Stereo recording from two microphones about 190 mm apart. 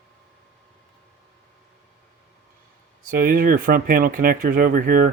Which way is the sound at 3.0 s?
50° right (ahead or behind).